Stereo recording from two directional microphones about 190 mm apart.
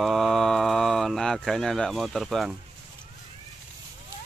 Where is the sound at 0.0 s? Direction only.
Centre (ahead or behind).